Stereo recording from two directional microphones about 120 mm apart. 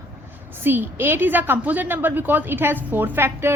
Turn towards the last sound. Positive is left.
turn(degrees=-20)  # may be behind; listen again after turning